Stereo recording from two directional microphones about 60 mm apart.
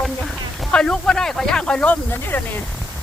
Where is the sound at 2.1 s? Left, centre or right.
Left.